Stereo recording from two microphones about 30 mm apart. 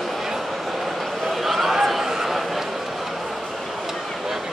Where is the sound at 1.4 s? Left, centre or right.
Centre.